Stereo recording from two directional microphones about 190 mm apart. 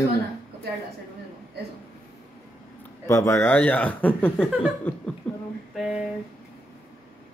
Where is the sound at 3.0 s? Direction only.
15° left (ahead or behind).